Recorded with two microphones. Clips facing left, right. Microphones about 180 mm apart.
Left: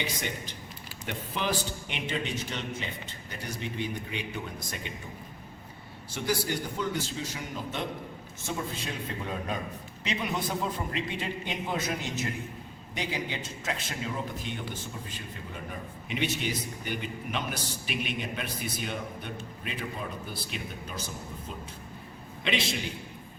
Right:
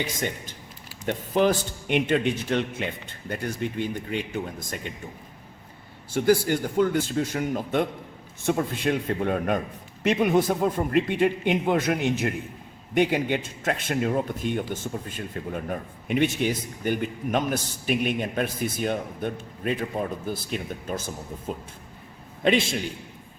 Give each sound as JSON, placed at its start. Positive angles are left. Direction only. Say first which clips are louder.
{"t": 0.0, "sound": "a man's voice", "louder": "right 5 dB", "side_deg": -45}
{"t": 6.1, "sound": "a man's voice", "louder": "right 9 dB", "side_deg": -50}